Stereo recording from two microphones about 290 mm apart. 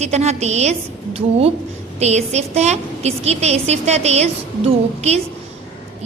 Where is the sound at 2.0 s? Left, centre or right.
Right.